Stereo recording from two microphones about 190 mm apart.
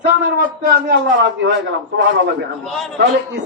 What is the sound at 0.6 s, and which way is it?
Speech, 60° right (ahead or behind).